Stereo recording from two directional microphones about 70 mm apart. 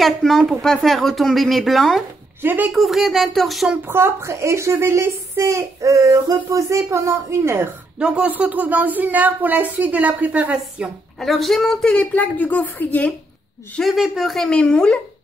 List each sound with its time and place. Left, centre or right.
0.0 s speech: centre
2.4 s speech: right
2.7 s speech: centre
3.8 s speech: right
8.0 s speech: centre
11.1 s speech: centre; by 13.1 s left
13.8 s speech: centre
14.5 s speech: centre